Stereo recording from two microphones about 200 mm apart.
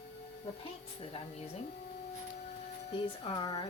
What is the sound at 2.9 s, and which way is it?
Speech, 25° left (ahead or behind).